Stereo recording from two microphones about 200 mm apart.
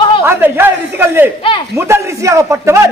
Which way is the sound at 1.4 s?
25° left (ahead or behind).